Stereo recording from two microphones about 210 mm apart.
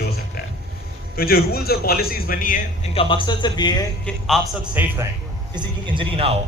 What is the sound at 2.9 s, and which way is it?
Speech, 20° left (ahead or behind).